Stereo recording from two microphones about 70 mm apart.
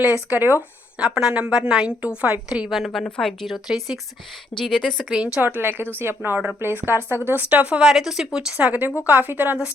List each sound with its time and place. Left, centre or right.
0.3 s speech: right
0.9 s a woman's voice: centre
2.6 s speech: centre
3.5 s speech: centre
5.1 s a woman's voice: centre
5.4 s a woman's voice: right
7.3 s speech: right
7.9 s a woman's voice: centre
8.5 s speech: right